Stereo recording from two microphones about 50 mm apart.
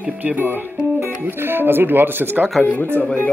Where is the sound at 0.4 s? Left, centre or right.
Right.